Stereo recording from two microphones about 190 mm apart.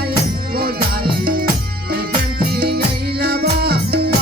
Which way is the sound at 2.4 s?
55° right (ahead or behind).